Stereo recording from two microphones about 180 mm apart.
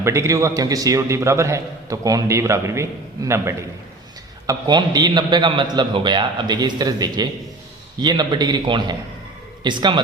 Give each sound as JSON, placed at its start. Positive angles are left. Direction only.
{"t": 0.0, "sound": "a man's voice", "side_deg": -15}